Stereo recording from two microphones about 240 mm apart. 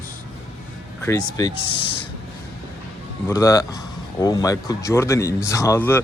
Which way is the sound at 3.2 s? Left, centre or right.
Centre.